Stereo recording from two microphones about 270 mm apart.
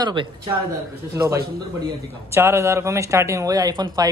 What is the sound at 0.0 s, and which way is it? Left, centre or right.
Speech, centre.